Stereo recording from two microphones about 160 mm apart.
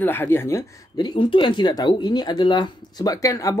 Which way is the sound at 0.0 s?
15° left (ahead or behind).